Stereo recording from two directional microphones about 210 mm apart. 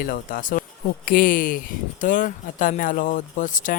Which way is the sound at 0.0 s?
45° left (ahead or behind).